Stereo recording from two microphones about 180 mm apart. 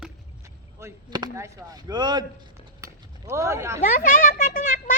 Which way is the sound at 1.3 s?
15° right (ahead or behind).